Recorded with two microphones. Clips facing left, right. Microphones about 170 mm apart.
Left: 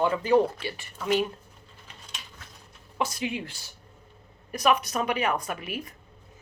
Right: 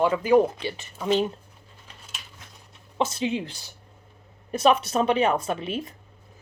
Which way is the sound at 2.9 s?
25° right (ahead or behind).